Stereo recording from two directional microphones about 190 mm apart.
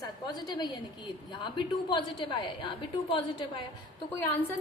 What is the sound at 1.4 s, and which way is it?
A woman's voice, 25° left (ahead or behind).